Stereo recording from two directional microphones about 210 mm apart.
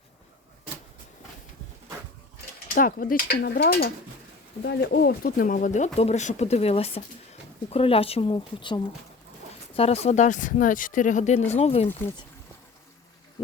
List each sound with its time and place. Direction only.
2.7 s mechanisms: 40° left (ahead or behind)
4.6 s speech: 55° left (ahead or behind); by 11.9 s 30° left (ahead or behind)